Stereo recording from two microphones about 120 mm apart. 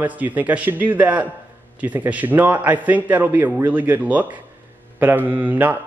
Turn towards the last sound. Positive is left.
turn(degrees=-15)  # may be behind; listen again after turning